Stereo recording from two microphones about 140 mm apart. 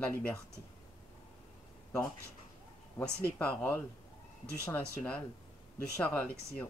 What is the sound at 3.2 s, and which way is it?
Speech, 10° left (ahead or behind).